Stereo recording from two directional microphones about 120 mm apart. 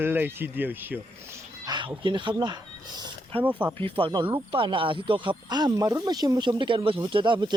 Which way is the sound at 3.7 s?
50° right (ahead or behind).